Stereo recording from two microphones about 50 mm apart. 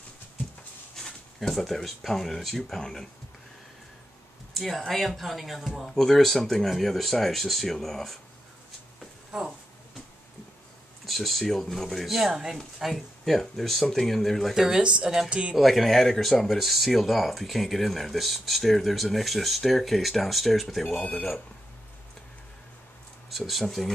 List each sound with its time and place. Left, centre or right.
0.9 s speech: centre
4.6 s speech: centre
11.1 s speech: centre
12.3 s speech: centre
12.7 s speech: centre
14.5 s speech: centre
14.8 s a woman's voice: centre
15.5 s speech: centre
23.3 s speech: centre